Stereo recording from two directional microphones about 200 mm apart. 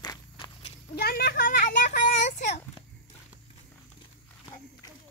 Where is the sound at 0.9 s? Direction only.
50° left (ahead or behind).